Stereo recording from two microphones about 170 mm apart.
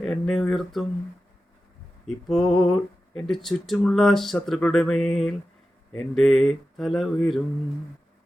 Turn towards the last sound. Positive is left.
turn(degrees=0)  # may be behind; listen again after turning